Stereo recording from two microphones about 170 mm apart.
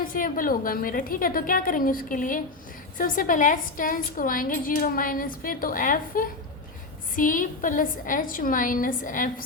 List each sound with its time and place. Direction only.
0.1 s a woman's voice: 55° left (ahead or behind)